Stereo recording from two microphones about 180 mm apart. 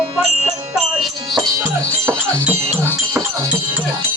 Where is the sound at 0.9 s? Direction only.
Centre (ahead or behind).